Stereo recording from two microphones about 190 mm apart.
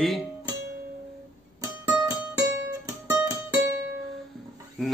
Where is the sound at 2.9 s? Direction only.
15° right (ahead or behind).